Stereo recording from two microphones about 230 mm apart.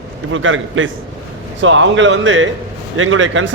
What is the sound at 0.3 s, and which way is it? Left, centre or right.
A man's voice, right.